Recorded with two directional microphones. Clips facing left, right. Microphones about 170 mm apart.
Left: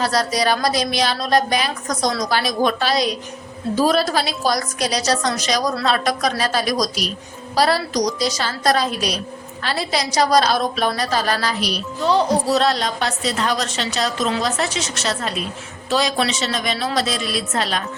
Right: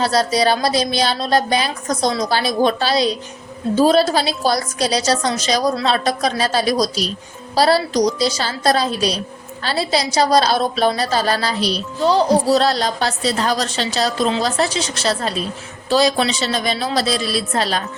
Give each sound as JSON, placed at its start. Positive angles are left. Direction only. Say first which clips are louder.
{"t": 0.0, "sound": "a woman's voice", "louder": "right 3 dB", "side_deg": -30}